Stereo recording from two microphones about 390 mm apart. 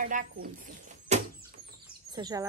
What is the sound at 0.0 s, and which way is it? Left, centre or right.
Speech, right.